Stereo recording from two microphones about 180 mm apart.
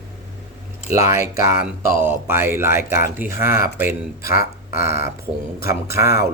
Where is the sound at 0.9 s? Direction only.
15° right (ahead or behind).